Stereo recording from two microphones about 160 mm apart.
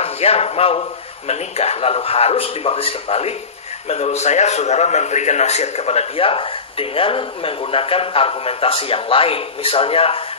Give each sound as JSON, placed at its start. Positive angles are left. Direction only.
{"t": 0.0, "sound": "a man's voice", "side_deg": 40}